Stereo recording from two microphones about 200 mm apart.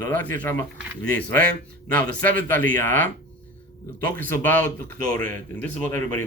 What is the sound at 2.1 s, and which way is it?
Speech, 45° right (ahead or behind).